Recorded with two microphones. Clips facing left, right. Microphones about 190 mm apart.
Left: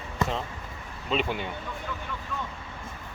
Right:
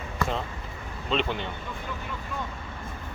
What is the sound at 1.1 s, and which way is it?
Speech, 5° left (ahead or behind).